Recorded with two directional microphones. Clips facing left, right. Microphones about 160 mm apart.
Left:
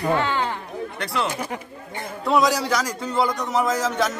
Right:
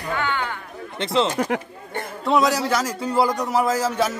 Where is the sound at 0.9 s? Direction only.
25° right (ahead or behind).